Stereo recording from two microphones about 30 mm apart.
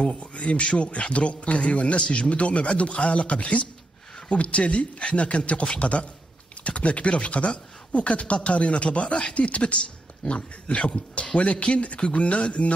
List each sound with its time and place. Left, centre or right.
0.0 s a man's voice: left
11.8 s speech: left